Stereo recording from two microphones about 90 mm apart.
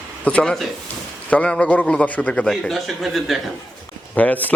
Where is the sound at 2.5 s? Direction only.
Centre (ahead or behind).